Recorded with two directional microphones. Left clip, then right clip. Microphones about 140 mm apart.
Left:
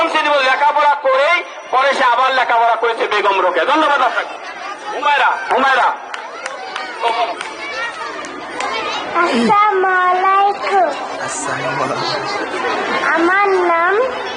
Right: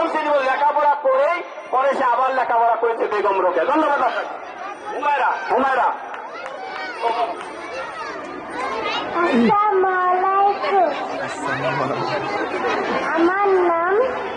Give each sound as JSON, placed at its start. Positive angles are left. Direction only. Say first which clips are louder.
{"t": 0.0, "sound": "a man's voice", "louder": "left 5 dB", "side_deg": -15}
{"t": 7.0, "sound": "speech", "louder": "left 4 dB", "side_deg": -25}
{"t": 8.6, "sound": "children playing", "louder": "left 3 dB", "side_deg": -15}
{"t": 11.6, "sound": "a man's voice", "louder": "left 4 dB", "side_deg": -15}